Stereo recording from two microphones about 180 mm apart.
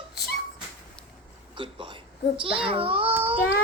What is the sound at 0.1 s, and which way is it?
Dog, 65° left (ahead or behind).